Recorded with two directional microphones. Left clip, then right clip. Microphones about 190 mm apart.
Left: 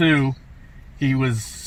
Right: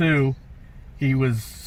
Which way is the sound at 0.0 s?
15° left (ahead or behind).